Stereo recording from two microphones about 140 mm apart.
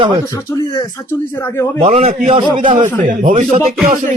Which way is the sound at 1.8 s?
50° right (ahead or behind).